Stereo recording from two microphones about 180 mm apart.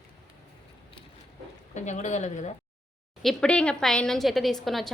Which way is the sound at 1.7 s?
40° left (ahead or behind).